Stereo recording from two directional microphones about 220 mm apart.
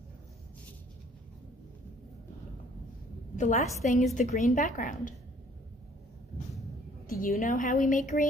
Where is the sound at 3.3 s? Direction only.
35° left (ahead or behind).